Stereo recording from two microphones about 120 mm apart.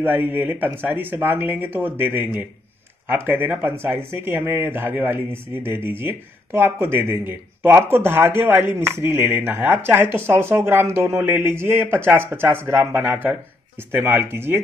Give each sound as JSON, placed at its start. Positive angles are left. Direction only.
{"t": 0.0, "sound": "speech", "side_deg": -15}